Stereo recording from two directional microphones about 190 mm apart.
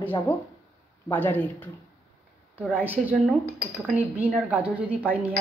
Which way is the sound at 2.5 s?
5° right (ahead or behind).